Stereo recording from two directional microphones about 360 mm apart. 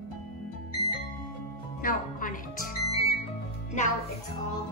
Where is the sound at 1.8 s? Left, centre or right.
Left.